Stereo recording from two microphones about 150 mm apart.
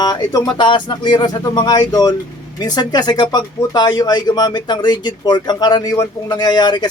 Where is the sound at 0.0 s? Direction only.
25° left (ahead or behind).